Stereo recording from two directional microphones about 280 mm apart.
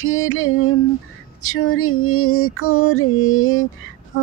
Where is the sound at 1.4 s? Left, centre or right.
Left.